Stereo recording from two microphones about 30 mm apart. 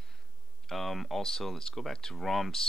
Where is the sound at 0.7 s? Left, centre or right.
Centre.